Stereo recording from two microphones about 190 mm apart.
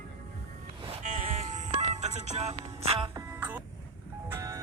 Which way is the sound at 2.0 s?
35° right (ahead or behind).